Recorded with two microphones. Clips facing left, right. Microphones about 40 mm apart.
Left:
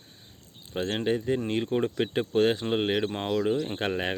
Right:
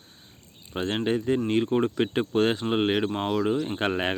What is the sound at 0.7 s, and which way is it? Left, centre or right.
Speech, centre.